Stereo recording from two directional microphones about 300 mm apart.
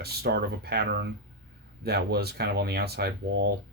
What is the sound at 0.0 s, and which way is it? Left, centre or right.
Speech, right.